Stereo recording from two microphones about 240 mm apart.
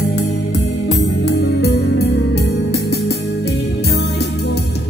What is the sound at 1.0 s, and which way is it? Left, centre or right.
Music, left.